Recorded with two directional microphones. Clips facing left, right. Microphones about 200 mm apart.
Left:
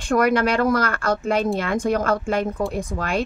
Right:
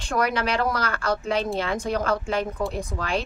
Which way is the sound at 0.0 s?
50° left (ahead or behind).